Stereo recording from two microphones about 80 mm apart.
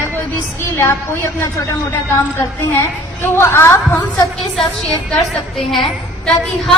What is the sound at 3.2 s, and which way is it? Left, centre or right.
Speech, left.